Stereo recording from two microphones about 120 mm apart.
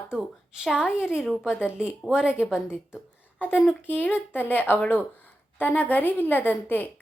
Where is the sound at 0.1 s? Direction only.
5° right (ahead or behind).